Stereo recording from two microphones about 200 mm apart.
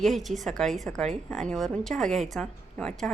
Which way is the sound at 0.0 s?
Centre (ahead or behind).